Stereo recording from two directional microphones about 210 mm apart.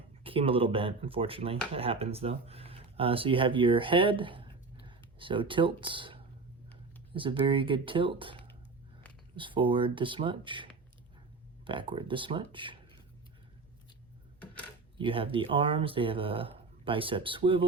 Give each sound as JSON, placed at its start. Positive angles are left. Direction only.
{"t": 0.2, "sound": "speech", "side_deg": -25}
{"t": 14.9, "sound": "speech", "side_deg": -25}